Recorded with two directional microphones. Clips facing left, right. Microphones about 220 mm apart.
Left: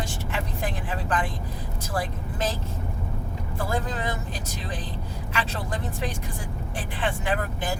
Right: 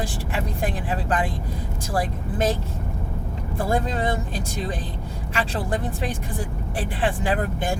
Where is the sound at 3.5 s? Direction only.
30° right (ahead or behind).